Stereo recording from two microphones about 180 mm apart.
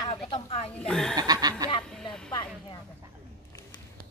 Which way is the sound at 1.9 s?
5° left (ahead or behind).